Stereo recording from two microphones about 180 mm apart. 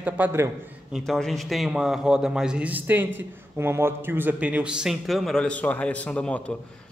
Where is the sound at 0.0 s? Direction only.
10° right (ahead or behind).